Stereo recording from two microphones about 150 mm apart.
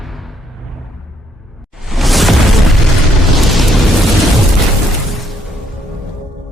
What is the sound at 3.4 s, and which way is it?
Eruption, centre (ahead or behind).